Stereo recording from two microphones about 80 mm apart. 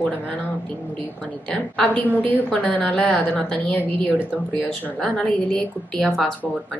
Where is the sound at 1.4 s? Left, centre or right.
Centre.